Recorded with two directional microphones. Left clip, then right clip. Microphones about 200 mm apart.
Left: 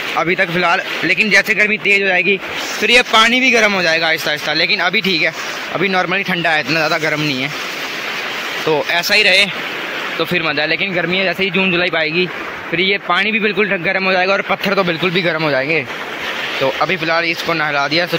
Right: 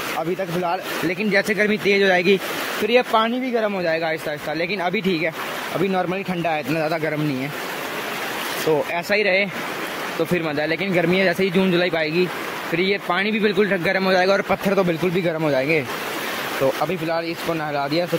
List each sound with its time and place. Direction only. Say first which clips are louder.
0.4 s a man's voice: left 9 dB; 5° left (ahead or behind)
1.0 s a man's voice: left 8 dB; 10° right (ahead or behind)
1.7 s speech: left 4 dB; 25° right (ahead or behind)
2.9 s a man's voice: left 7 dB; centre (ahead or behind)
3.3 s speech: left 10 dB; 40° left (ahead or behind)
3.8 s a man's voice: left 7 dB; 5° right (ahead or behind)
8.9 s a man's voice: left 7 dB; 5° right (ahead or behind)
11.0 s a man's voice: left 3 dB; 25° right (ahead or behind); by 15.8 s 10° right (ahead or behind)
17.1 s a man's voice: left 8 dB; centre (ahead or behind)